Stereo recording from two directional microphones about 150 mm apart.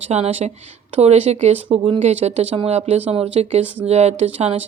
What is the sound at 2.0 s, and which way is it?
Speech, 45° right (ahead or behind).